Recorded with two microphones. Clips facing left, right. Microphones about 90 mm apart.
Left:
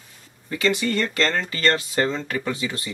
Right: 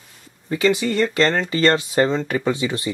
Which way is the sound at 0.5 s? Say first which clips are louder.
Right 4 dB; 25° right (ahead or behind).